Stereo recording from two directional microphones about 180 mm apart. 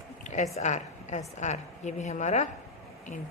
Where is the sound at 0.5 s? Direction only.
40° left (ahead or behind).